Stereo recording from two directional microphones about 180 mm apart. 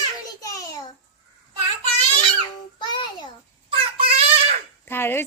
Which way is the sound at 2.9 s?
25° left (ahead or behind).